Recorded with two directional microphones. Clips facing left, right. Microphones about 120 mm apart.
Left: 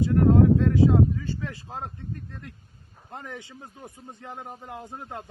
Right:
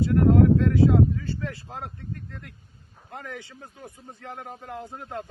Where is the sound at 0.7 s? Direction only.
15° left (ahead or behind).